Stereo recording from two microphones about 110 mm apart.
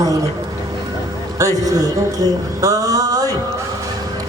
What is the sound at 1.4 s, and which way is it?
Speech, 35° right (ahead or behind).